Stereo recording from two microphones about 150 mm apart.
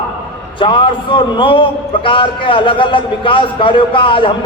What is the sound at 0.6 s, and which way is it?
A man's voice, 35° left (ahead or behind).